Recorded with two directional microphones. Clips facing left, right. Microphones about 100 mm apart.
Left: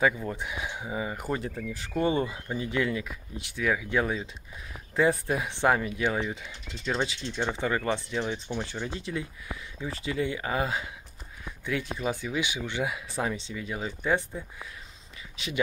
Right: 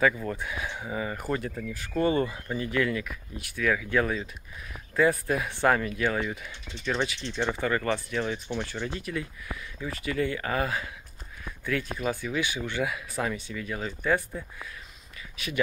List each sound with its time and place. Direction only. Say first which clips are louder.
0.0 s speech: right 1 dB; 15° left (ahead or behind)